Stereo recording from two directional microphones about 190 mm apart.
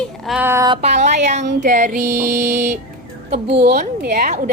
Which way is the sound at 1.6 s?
40° right (ahead or behind).